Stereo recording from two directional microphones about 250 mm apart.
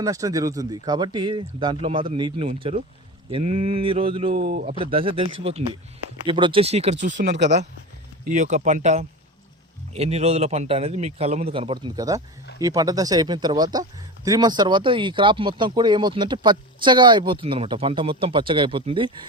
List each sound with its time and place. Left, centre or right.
0.0 s speech: centre
4.4 s speech: right
4.7 s speech: right
6.9 s speech: right